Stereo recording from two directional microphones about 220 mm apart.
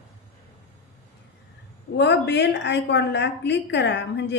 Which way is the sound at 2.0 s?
50° left (ahead or behind).